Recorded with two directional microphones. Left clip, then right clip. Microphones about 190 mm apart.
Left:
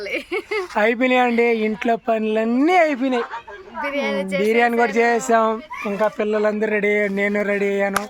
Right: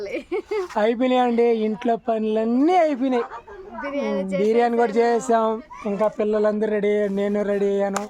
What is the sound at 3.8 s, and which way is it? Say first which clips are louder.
Speech: left 3 dB; 15° right (ahead or behind).